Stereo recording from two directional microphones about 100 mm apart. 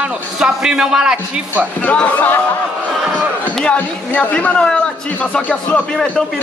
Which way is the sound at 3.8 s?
15° left (ahead or behind).